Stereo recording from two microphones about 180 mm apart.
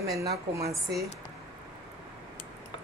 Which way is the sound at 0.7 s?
Centre (ahead or behind).